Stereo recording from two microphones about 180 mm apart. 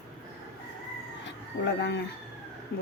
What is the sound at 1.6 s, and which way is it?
Speech, 70° left (ahead or behind).